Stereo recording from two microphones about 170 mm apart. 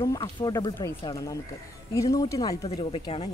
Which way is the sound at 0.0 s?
25° left (ahead or behind).